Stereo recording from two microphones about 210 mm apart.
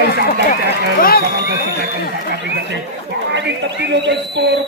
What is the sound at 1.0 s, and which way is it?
Speech, 45° left (ahead or behind).